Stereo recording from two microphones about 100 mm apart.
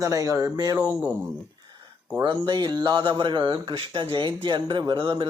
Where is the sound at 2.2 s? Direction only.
50° right (ahead or behind).